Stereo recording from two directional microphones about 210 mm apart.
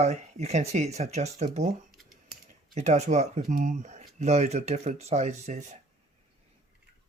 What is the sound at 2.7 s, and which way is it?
Speech, 35° right (ahead or behind).